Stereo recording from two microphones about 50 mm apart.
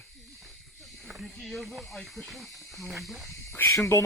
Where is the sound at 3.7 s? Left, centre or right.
Left.